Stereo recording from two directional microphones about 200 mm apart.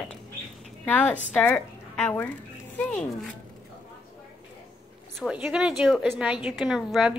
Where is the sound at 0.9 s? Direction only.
10° left (ahead or behind).